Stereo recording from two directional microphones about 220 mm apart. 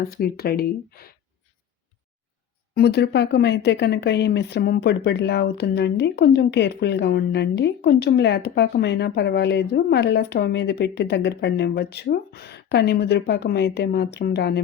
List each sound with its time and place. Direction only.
0.0 s speech: 45° left (ahead or behind)
2.7 s speech: 50° left (ahead or behind)